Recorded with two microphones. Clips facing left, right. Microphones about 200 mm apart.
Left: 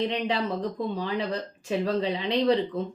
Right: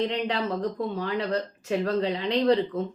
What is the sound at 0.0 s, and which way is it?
Speech, 10° left (ahead or behind).